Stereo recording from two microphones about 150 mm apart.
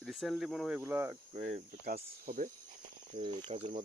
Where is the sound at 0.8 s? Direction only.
15° right (ahead or behind).